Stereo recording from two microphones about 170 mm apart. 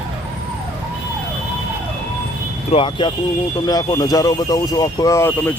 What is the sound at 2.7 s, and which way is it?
Speech, 30° left (ahead or behind).